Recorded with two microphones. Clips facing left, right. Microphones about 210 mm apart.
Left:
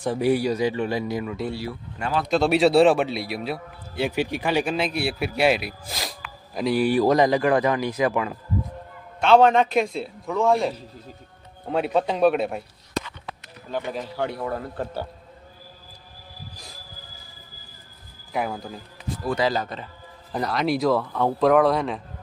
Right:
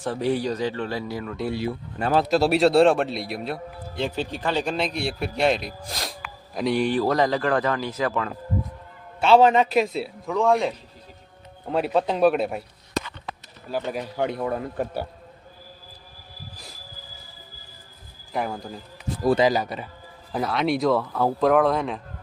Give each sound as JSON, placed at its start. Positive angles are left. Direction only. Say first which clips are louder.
{"t": 0.0, "sound": "speech", "louder": "left 3 dB", "side_deg": 10}
{"t": 1.5, "sound": "speech", "louder": "right 3 dB", "side_deg": -20}
{"t": 2.2, "sound": "a man's voice", "louder": "left 2 dB", "side_deg": -5}
{"t": 9.2, "sound": "a man's voice", "louder": "even", "side_deg": -5}
{"t": 13.9, "sound": "a man's voice", "louder": "right 2 dB", "side_deg": -15}
{"t": 18.3, "sound": "a man's voice", "louder": "left 1 dB", "side_deg": 0}
{"t": 19.4, "sound": "a man's voice", "louder": "right 3 dB", "side_deg": -15}
{"t": 20.3, "sound": "a man's voice", "louder": "even", "side_deg": 0}